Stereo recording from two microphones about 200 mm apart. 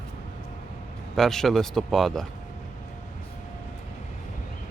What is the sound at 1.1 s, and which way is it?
Speech, centre (ahead or behind).